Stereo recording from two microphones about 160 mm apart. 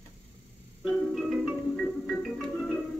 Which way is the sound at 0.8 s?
Centre (ahead or behind).